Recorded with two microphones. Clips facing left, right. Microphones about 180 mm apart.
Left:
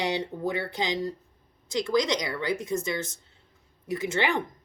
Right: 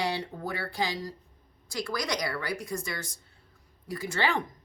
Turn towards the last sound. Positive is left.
turn(degrees=20)  # may be behind; listen again after turning